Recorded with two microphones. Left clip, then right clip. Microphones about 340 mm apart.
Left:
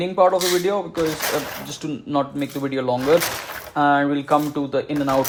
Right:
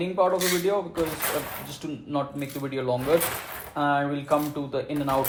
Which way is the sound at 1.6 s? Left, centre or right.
Left.